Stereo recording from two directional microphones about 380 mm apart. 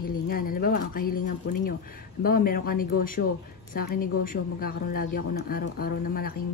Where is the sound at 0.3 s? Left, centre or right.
Left.